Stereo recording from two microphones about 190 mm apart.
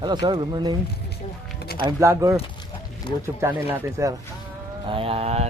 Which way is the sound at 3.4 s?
10° right (ahead or behind).